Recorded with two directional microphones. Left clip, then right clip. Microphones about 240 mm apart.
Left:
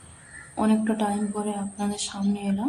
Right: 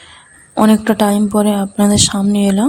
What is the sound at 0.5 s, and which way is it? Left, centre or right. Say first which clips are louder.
A woman's voice: right 12 dB; right.